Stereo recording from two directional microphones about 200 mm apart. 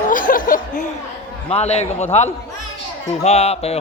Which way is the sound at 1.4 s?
30° left (ahead or behind).